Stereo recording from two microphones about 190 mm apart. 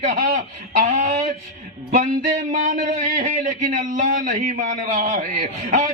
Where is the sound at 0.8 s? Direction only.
40° right (ahead or behind).